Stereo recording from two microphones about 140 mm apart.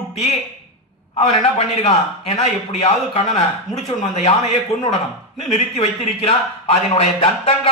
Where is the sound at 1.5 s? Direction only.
45° left (ahead or behind).